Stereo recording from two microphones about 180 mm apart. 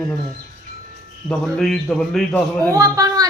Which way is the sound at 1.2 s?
Centre (ahead or behind).